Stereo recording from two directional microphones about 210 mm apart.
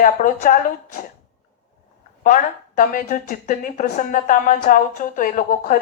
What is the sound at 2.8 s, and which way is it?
Speech, 40° left (ahead or behind).